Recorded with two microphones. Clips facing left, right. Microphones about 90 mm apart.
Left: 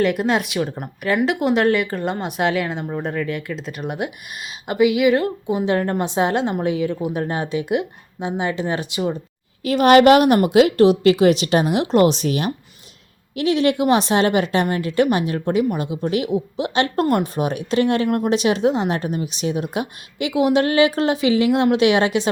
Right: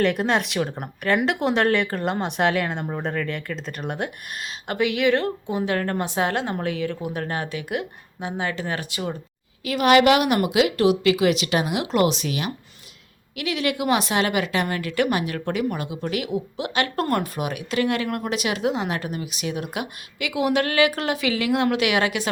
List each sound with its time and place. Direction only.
0.0 s speech: 5° left (ahead or behind)
9.6 s a woman's voice: 40° left (ahead or behind); by 17.2 s 20° left (ahead or behind)
17.3 s speech: 35° left (ahead or behind)